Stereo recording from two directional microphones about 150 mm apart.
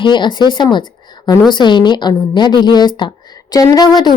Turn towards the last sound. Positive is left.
turn(degrees=30)  # may be behind; listen again after turning